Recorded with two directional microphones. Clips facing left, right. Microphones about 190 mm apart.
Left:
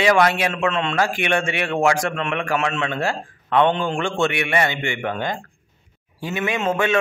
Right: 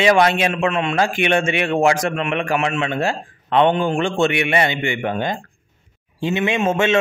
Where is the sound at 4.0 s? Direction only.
20° right (ahead or behind).